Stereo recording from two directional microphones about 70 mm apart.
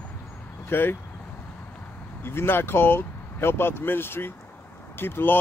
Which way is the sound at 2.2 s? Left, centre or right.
Left.